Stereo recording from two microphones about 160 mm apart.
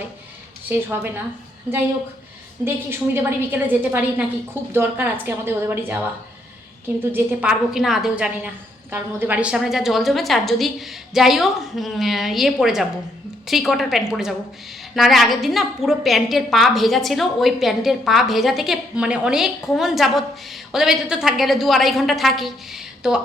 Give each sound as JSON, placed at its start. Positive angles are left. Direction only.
{"t": 0.7, "sound": "a woman's voice", "side_deg": -15}
{"t": 2.6, "sound": "a woman's voice", "side_deg": -15}